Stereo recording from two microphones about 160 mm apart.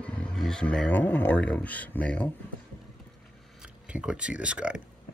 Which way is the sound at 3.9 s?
5° right (ahead or behind).